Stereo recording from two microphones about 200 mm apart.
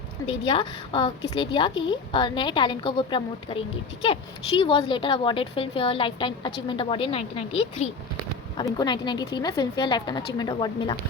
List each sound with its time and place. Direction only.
0.3 s a woman's voice: 25° left (ahead or behind)